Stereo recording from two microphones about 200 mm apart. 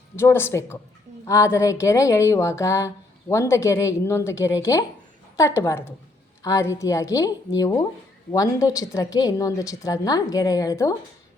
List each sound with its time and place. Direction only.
0.2 s speech: 10° left (ahead or behind)